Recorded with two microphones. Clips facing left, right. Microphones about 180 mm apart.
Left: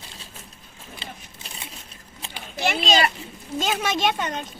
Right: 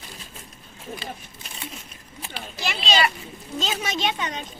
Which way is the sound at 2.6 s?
50° left (ahead or behind).